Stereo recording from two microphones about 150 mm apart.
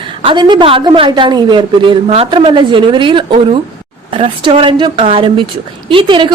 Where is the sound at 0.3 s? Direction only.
30° right (ahead or behind).